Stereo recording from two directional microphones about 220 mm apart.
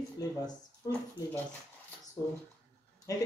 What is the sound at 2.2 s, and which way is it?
Speech, 15° left (ahead or behind).